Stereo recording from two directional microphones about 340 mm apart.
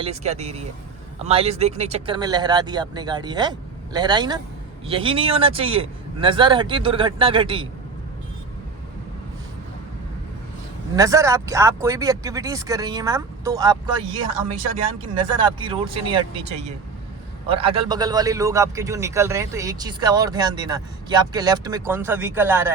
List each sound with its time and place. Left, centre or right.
0.0 s speech: centre
10.9 s speech: centre
15.4 s speech: centre